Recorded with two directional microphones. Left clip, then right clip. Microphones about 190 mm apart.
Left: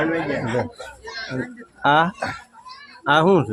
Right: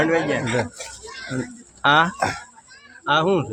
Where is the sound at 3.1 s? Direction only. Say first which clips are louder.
Left 3 dB; 35° left (ahead or behind).